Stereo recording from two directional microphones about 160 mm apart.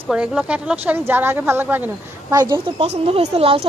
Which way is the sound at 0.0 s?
5° right (ahead or behind).